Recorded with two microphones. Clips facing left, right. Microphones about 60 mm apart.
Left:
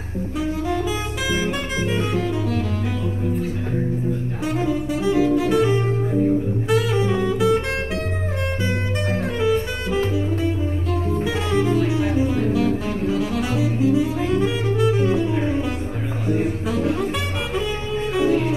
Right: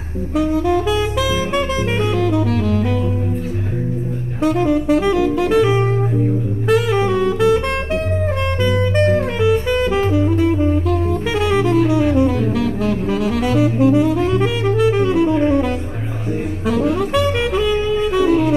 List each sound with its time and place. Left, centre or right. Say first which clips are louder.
0.4 s music: right 8 dB; right
2.0 s saxophone: right 8 dB; right
4.4 s saxophone: right 9 dB; right
8.9 s music: right 8 dB; right
16.7 s saxophone: right 8 dB; right
18.1 s music: right 3 dB; right